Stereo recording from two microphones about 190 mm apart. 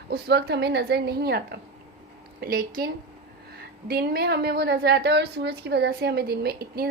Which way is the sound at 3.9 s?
55° right (ahead or behind).